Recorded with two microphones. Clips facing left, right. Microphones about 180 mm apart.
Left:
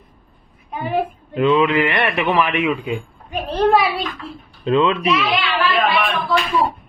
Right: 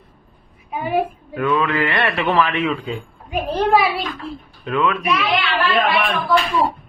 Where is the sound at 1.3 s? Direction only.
20° left (ahead or behind).